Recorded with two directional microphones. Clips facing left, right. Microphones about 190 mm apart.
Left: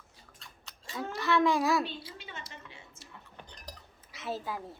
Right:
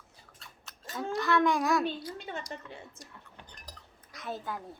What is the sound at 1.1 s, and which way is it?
Speech, centre (ahead or behind).